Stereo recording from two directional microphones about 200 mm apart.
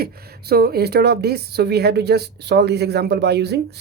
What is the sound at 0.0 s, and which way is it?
Speech, 50° right (ahead or behind).